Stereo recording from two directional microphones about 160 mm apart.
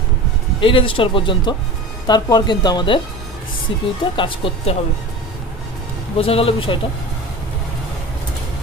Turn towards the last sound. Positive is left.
turn(degrees=35)  # may be behind; listen again after turning